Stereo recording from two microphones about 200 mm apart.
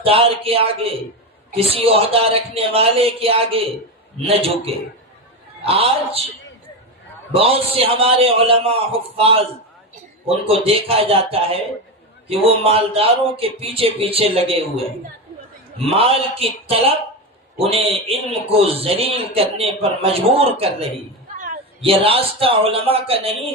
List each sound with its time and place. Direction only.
0.0 s a man's voice: 30° right (ahead or behind)
7.3 s a man's voice: 30° right (ahead or behind)
10.7 s a man's voice: 30° right (ahead or behind)
15.8 s a man's voice: 30° right (ahead or behind)
21.3 s a sound: 40° right (ahead or behind)
21.8 s a man's voice: 30° right (ahead or behind)